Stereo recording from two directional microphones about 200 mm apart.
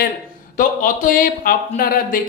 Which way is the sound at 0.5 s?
40° left (ahead or behind).